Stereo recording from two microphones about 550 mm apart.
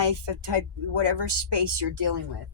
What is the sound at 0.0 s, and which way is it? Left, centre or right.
Speech, right.